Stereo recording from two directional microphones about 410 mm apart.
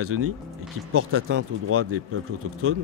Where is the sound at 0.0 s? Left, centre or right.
Right.